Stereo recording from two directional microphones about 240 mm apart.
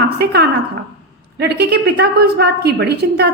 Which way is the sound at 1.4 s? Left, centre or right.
Right.